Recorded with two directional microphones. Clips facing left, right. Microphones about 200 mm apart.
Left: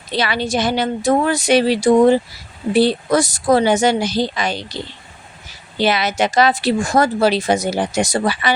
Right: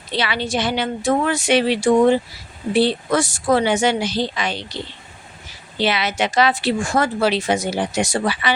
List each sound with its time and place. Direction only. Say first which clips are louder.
0.1 s a woman's voice: left 3 dB; 45° left (ahead or behind)
5.8 s a woman's voice: left 3 dB; 45° left (ahead or behind)